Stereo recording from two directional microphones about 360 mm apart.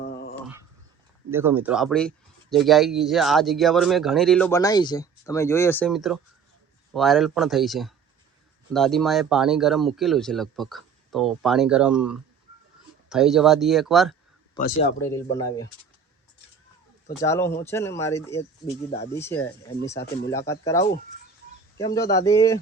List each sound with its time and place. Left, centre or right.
0.0 s dog: left
1.3 s speech: centre
14.6 s speech: centre
17.2 s speech: centre